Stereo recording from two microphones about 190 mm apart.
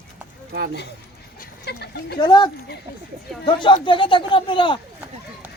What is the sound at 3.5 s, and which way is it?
Speech, 25° left (ahead or behind).